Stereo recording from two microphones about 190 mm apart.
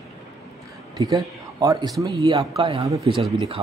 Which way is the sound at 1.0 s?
20° right (ahead or behind).